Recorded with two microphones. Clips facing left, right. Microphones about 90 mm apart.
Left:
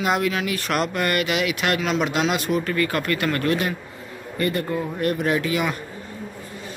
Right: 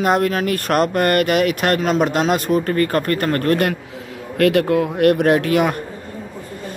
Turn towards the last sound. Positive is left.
turn(degrees=-55)  # may be behind; listen again after turning